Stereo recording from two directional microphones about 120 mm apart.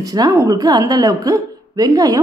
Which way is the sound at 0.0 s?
30° right (ahead or behind).